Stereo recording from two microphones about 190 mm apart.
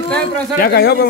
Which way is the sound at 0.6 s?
55° left (ahead or behind).